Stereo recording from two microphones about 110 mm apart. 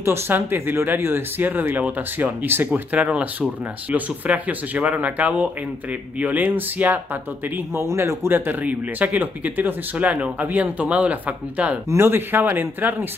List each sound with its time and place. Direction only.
0.0 s speech: 20° right (ahead or behind)